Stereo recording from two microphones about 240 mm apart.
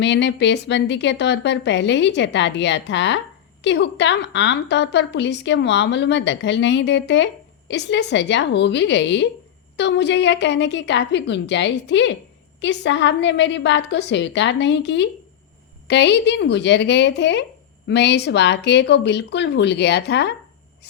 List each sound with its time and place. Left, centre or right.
0.0 s a woman's voice: left